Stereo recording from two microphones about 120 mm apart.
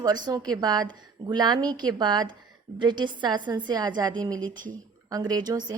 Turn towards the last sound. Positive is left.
turn(degrees=-35)  # may be behind; listen again after turning